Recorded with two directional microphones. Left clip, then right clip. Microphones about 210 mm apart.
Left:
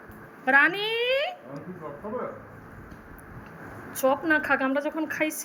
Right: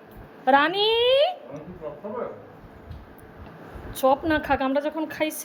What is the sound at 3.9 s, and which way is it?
A woman's voice, 15° right (ahead or behind).